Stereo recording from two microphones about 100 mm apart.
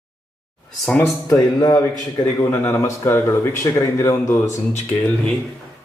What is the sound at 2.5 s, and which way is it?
Speech, 25° left (ahead or behind).